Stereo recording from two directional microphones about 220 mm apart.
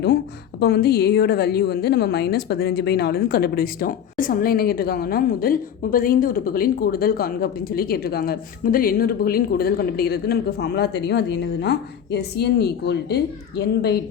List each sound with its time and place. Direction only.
0.6 s a woman's voice: 45° left (ahead or behind)